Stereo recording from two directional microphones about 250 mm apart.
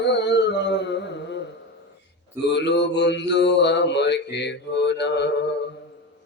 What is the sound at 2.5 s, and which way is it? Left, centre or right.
Mantra, left.